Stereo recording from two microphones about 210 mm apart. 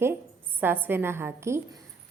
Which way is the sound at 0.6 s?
10° right (ahead or behind).